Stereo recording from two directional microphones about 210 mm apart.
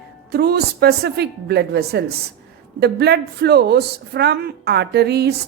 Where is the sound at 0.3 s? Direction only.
50° right (ahead or behind).